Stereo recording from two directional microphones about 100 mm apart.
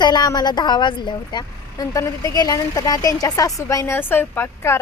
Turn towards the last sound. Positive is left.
turn(degrees=25)  # may be behind; listen again after turning